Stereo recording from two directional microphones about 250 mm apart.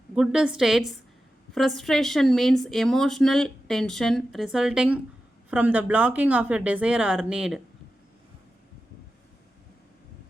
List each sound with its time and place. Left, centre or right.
0.2 s speech: centre